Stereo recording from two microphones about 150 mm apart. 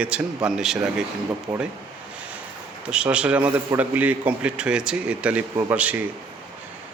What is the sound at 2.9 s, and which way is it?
A man's voice, 5° right (ahead or behind).